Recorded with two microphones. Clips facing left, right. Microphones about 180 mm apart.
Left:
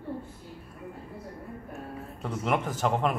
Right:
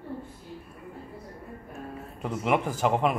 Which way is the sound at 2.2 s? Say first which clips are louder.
Right 2 dB; 5° right (ahead or behind).